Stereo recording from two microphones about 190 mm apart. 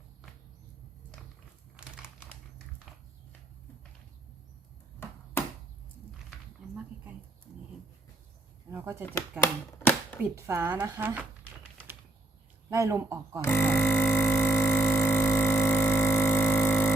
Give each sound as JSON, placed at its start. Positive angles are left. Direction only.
{"t": 1.7, "sound": "crumpling", "side_deg": -5}
{"t": 8.7, "sound": "a woman's voice", "side_deg": -10}
{"t": 9.4, "sound": "speech", "side_deg": 10}
{"t": 10.3, "sound": "a woman's voice", "side_deg": -15}
{"t": 12.7, "sound": "a woman's voice", "side_deg": -15}
{"t": 13.4, "sound": "a sound", "side_deg": 10}